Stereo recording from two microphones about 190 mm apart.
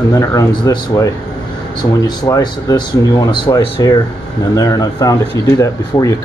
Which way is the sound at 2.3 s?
20° left (ahead or behind).